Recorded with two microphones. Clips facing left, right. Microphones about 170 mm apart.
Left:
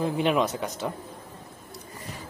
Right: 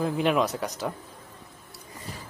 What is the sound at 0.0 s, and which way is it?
Speech, centre (ahead or behind).